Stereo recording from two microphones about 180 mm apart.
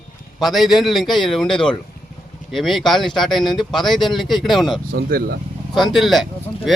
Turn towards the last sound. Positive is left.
turn(degrees=0)  # may be behind; listen again after turning